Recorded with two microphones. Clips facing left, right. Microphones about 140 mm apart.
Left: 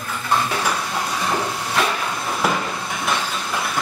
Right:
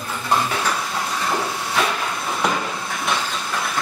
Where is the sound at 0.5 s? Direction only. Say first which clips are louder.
Left 1 dB; 5° left (ahead or behind).